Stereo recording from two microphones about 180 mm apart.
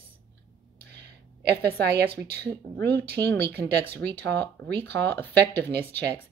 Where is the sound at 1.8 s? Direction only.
65° right (ahead or behind).